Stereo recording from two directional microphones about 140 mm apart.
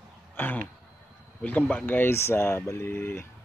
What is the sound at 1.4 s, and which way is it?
Speech, 10° left (ahead or behind).